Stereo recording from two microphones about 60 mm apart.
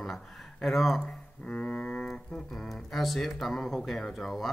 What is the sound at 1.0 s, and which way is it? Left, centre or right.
Music, left.